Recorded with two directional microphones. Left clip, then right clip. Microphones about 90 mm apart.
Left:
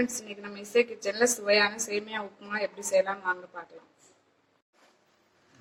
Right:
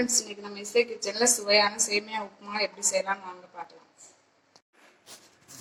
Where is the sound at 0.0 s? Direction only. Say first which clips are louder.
Right 4 dB; 30° left (ahead or behind).